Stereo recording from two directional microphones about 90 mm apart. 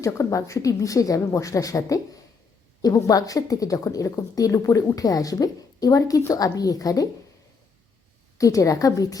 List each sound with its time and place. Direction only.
0.0 s a woman's voice: 35° left (ahead or behind)
8.4 s a woman's voice: 35° left (ahead or behind)